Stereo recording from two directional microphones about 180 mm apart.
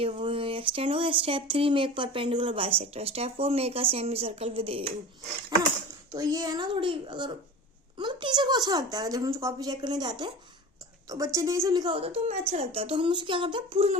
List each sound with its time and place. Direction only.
0.0 s a woman's voice: 30° right (ahead or behind)